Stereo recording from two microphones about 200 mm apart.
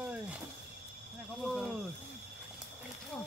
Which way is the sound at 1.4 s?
Centre (ahead or behind).